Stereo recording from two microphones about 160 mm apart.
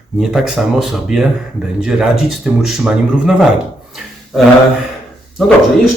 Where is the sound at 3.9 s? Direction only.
Centre (ahead or behind).